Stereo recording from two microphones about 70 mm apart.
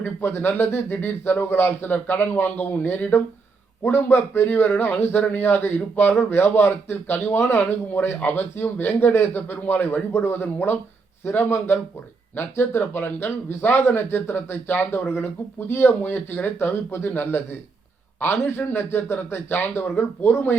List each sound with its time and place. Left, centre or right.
0.0 s speech: left